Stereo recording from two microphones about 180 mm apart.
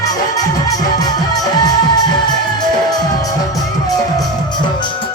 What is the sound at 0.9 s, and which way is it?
Music, 20° left (ahead or behind).